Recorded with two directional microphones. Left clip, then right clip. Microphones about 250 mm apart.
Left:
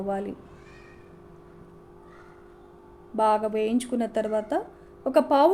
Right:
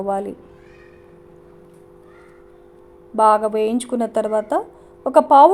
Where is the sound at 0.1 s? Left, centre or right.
Centre.